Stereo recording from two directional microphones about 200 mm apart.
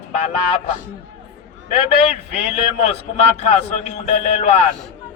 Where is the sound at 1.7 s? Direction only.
30° left (ahead or behind).